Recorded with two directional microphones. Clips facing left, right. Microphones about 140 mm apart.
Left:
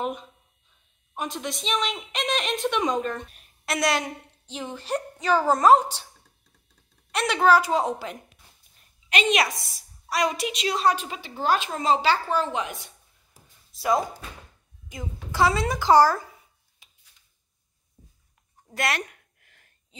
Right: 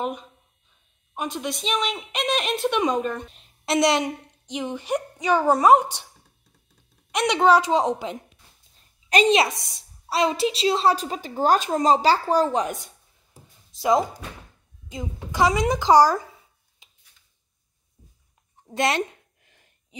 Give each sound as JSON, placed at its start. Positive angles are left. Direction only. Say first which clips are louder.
{"t": 0.0, "sound": "a woman's voice", "louder": "right 1 dB", "side_deg": 0}
{"t": 3.3, "sound": "a woman's voice", "louder": "right 5 dB", "side_deg": -25}
{"t": 7.1, "sound": "a woman's voice", "louder": "right 2 dB", "side_deg": -15}
{"t": 9.1, "sound": "a woman's voice", "louder": "right 6 dB", "side_deg": -40}
{"t": 9.6, "sound": "a woman's voice", "louder": "left 1 dB", "side_deg": -20}
{"t": 13.7, "sound": "a woman's voice", "louder": "right 3 dB", "side_deg": -20}
{"t": 16.8, "sound": "a sound", "louder": "right 1 dB", "side_deg": -20}
{"t": 18.6, "sound": "a sound", "louder": "right 5 dB", "side_deg": -25}